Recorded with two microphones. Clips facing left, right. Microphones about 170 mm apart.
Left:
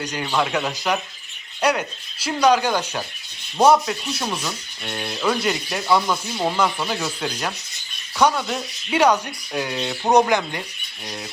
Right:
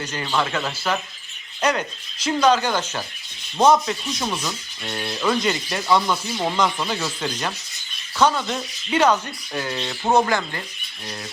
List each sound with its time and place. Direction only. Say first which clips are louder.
0.2 s speech: left 2 dB; 5° left (ahead or behind)
10.0 s speech: left 2 dB; 15° left (ahead or behind)